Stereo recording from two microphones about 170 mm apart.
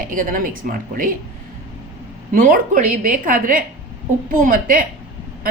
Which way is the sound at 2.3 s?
55° right (ahead or behind).